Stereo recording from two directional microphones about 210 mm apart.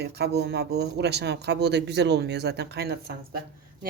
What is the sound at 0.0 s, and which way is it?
Speech, 50° right (ahead or behind).